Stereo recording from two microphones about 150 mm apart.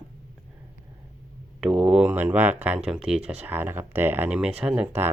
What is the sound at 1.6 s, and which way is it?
Speech, 5° right (ahead or behind).